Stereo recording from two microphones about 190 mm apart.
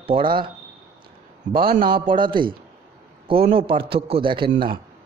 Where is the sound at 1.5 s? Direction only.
25° right (ahead or behind).